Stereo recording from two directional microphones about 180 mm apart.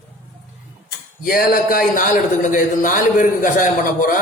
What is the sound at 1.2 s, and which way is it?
A man's voice, 55° left (ahead or behind).